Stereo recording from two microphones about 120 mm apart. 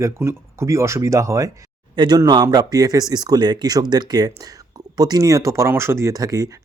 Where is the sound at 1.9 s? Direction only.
40° right (ahead or behind).